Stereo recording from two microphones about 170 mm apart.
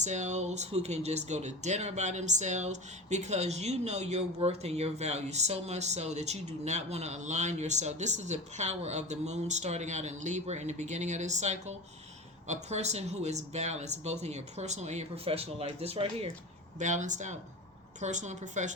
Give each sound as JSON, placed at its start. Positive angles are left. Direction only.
{"t": 0.0, "sound": "speech", "side_deg": -45}
{"t": 16.7, "sound": "speech", "side_deg": -45}